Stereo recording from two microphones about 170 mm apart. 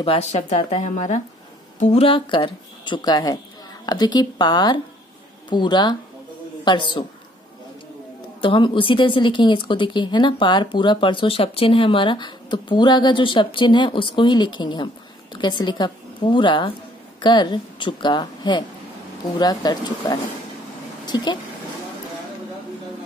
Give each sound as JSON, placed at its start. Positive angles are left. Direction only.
{"t": 0.0, "sound": "a woman's voice", "side_deg": 35}
{"t": 8.4, "sound": "a woman's voice", "side_deg": 30}